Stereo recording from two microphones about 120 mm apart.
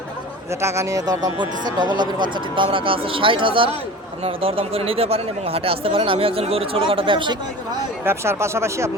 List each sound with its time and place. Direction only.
0.6 s speech: 25° right (ahead or behind); by 7.3 s 45° right (ahead or behind)
8.0 s speech: 20° right (ahead or behind)